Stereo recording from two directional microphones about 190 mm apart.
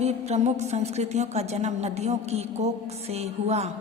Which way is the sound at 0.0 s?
35° right (ahead or behind).